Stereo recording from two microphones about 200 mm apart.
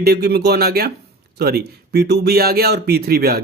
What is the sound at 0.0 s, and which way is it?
A man's voice, 55° right (ahead or behind).